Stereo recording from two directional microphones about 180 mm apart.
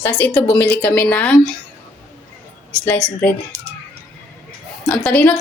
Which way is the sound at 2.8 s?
10° left (ahead or behind).